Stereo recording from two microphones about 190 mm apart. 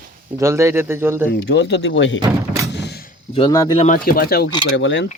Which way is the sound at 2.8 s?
55° left (ahead or behind).